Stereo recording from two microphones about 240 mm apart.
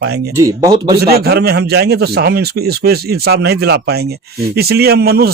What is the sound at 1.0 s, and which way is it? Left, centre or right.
A man's voice, right.